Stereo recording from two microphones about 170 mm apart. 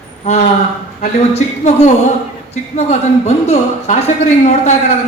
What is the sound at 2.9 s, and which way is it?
A man's voice, 40° left (ahead or behind).